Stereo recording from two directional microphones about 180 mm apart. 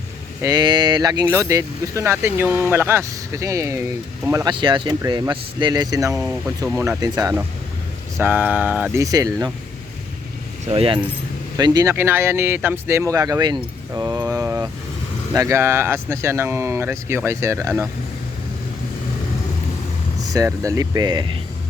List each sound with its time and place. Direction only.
0.4 s speech: 25° right (ahead or behind)
4.4 s speech: 25° right (ahead or behind)
8.2 s speech: 10° right (ahead or behind)
9.0 s speech: 20° right (ahead or behind)
10.7 s speech: 30° right (ahead or behind)
11.5 s speech: 20° right (ahead or behind)
20.3 s speech: 20° right (ahead or behind)